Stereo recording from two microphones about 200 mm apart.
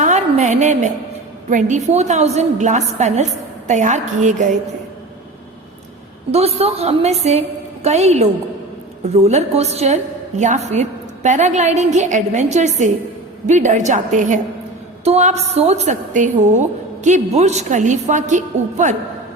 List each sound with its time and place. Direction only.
0.0 s a sound: 35° right (ahead or behind)
1.5 s a woman's voice: 40° right (ahead or behind)
6.3 s a woman's voice: 30° right (ahead or behind)